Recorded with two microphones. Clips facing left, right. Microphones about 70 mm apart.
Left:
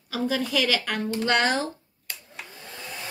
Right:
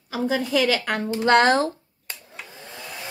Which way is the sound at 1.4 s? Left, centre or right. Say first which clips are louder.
Right 6 dB; right.